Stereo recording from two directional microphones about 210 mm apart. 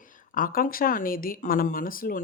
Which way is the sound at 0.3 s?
40° left (ahead or behind).